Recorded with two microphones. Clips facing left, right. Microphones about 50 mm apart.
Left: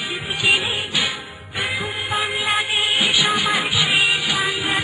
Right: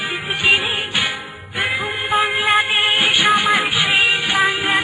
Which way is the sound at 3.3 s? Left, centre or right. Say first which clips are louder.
Right 4 dB; centre.